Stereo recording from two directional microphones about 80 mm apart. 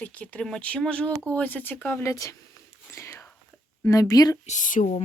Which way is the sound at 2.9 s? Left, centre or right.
Left.